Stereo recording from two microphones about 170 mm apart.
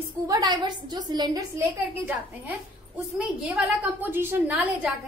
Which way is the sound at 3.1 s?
10° right (ahead or behind).